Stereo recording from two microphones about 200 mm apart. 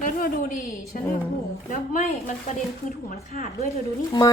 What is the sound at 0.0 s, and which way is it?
A woman's voice, 45° left (ahead or behind).